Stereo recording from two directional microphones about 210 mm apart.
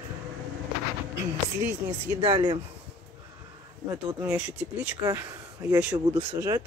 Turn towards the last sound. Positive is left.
turn(degrees=-15)  # may be behind; listen again after turning